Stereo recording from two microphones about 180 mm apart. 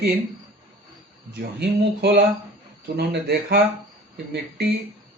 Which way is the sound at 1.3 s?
65° right (ahead or behind).